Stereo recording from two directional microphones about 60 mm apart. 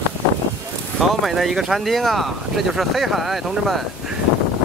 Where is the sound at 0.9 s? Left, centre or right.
Centre.